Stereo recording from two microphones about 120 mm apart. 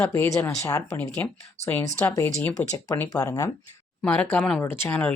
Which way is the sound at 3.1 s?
30° left (ahead or behind).